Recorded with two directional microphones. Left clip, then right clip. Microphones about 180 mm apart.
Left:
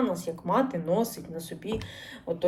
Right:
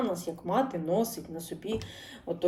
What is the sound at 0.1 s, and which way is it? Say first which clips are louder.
Speech: left 3 dB; 15° right (ahead or behind).